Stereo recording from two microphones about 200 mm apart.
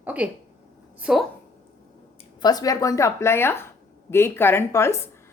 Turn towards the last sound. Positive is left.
turn(degrees=15)  # may be behind; listen again after turning